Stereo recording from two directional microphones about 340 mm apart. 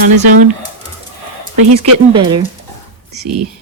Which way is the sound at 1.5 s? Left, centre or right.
Right.